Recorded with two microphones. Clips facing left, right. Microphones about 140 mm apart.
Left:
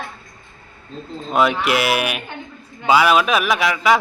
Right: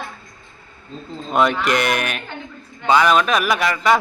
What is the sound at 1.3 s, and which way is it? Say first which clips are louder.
A man's voice: even; centre (ahead or behind).